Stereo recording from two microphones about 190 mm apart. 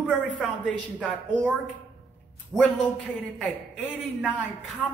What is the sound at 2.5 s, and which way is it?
Speech, centre (ahead or behind).